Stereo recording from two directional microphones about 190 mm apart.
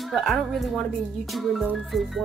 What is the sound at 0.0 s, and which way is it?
Speech, centre (ahead or behind).